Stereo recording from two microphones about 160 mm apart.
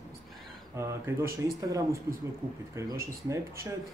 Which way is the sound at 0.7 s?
15° right (ahead or behind).